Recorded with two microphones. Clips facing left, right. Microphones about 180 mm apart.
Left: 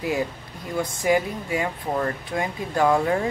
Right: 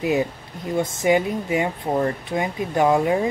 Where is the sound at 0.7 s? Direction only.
25° right (ahead or behind).